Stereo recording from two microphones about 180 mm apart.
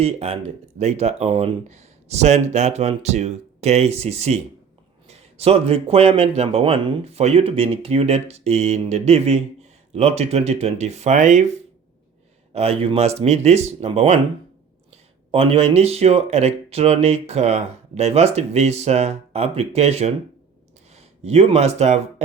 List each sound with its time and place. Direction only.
0.0 s speech: 35° right (ahead or behind)
12.5 s speech: 35° right (ahead or behind)